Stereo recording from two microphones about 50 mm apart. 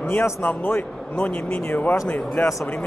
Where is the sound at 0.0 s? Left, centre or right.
Left.